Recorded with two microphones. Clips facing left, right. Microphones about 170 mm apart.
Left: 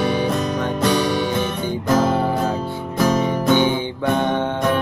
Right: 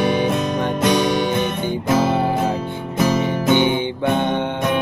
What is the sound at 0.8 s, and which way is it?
Music, 20° right (ahead or behind).